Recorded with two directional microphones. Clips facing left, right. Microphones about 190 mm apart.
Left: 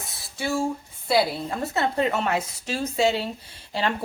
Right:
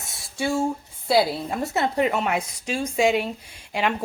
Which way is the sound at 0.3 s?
25° right (ahead or behind).